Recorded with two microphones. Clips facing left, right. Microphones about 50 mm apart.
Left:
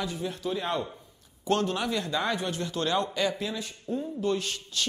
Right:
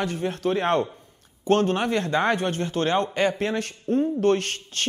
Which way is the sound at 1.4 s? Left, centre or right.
Right.